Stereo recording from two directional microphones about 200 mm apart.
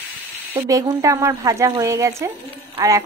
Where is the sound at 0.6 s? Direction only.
15° right (ahead or behind).